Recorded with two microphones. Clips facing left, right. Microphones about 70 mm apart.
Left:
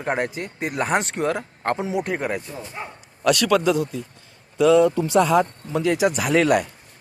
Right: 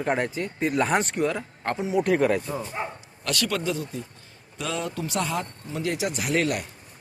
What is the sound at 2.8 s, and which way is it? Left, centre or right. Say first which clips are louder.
Speech: right 1 dB; centre.